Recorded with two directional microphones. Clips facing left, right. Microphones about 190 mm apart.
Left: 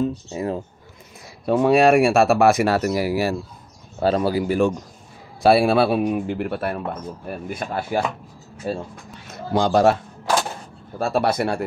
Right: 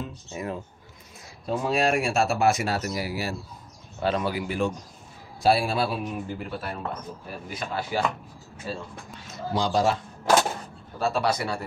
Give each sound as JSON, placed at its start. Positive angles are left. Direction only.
{"t": 0.0, "sound": "speech", "side_deg": 30}
{"t": 1.4, "sound": "speech", "side_deg": 65}
{"t": 4.0, "sound": "speech", "side_deg": 35}
{"t": 5.4, "sound": "speech", "side_deg": 65}
{"t": 11.0, "sound": "speech", "side_deg": 55}